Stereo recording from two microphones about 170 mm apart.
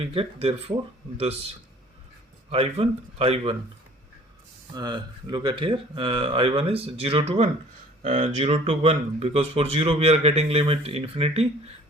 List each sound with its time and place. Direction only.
0.0 s speech: 35° right (ahead or behind)
2.5 s speech: 35° right (ahead or behind)
4.7 s speech: 25° right (ahead or behind)